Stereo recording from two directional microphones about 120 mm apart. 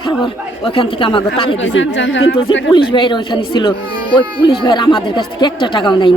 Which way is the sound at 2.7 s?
40° left (ahead or behind).